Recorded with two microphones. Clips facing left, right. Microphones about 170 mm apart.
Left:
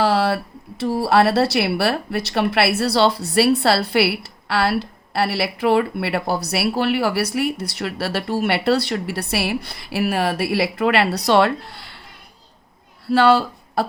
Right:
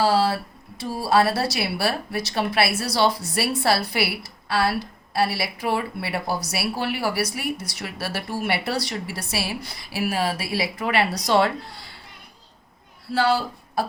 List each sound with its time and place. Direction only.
0.0 s a sound: 60° left (ahead or behind)
0.8 s speech: 60° left (ahead or behind)
13.1 s speech: 65° left (ahead or behind)